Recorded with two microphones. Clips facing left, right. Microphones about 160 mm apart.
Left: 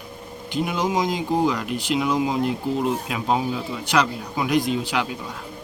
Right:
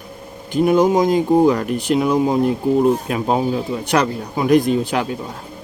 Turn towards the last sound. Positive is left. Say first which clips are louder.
# right 5 dB
turn(degrees=-45)  # may be behind; listen again after turning